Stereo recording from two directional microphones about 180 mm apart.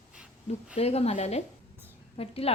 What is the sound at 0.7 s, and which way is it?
Speech, 35° left (ahead or behind).